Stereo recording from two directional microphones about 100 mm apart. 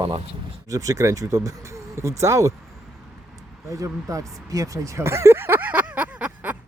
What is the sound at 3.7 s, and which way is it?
Speech, 35° right (ahead or behind).